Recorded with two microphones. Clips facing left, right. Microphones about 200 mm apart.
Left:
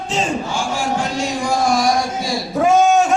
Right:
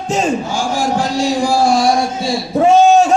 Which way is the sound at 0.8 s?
35° right (ahead or behind).